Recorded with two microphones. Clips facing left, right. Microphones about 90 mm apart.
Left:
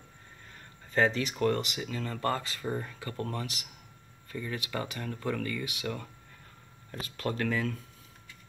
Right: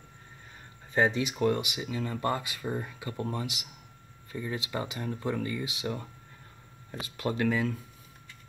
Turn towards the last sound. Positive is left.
turn(degrees=-10)  # may be behind; listen again after turning